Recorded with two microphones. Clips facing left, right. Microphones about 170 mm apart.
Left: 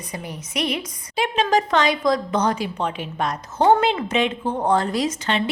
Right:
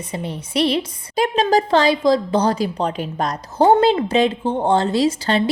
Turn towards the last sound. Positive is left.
turn(degrees=-35)  # may be behind; listen again after turning